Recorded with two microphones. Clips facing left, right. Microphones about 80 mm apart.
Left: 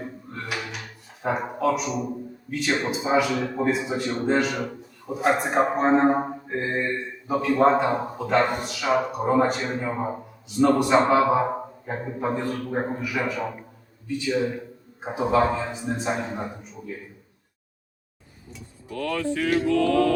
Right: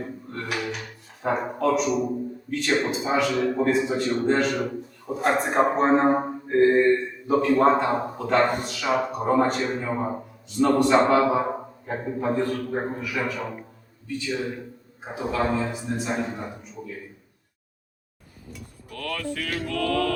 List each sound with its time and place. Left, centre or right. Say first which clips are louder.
0.0 s a sound: right 2 dB; centre
2.5 s a man's voice: right 1 dB; centre
15.1 s speech: left 5 dB; left
15.4 s a man's voice: right 1 dB; centre
15.7 s speech: left 1 dB; left
18.9 s a man's voice: left 5 dB; centre